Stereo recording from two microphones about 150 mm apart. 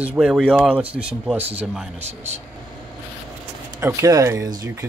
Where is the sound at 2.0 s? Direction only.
45° right (ahead or behind).